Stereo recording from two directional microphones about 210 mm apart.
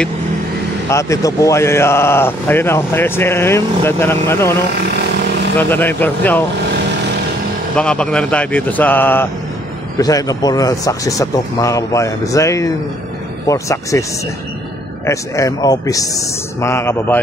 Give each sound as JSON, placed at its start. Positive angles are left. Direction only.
{"t": 0.8, "sound": "speech", "side_deg": 15}
{"t": 5.6, "sound": "speech", "side_deg": 10}
{"t": 7.7, "sound": "speech", "side_deg": 5}
{"t": 15.0, "sound": "speech", "side_deg": 15}